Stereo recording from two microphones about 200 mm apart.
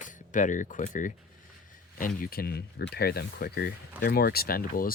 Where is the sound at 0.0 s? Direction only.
40° left (ahead or behind).